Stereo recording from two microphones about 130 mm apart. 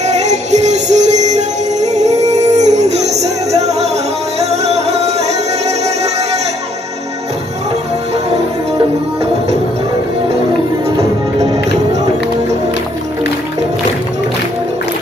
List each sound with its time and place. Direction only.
0.0 s music: 60° right (ahead or behind)
8.7 s music: 55° right (ahead or behind)